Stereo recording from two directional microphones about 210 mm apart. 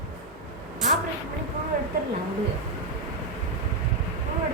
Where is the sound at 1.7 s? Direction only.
40° right (ahead or behind).